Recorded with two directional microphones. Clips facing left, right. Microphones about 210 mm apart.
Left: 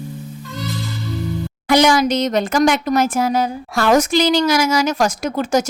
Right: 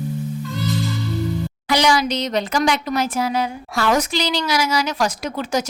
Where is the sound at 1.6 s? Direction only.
50° left (ahead or behind).